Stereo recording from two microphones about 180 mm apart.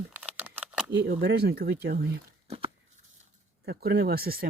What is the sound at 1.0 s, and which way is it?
Speech, 65° right (ahead or behind).